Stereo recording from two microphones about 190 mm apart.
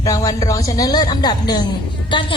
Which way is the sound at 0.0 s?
15° left (ahead or behind).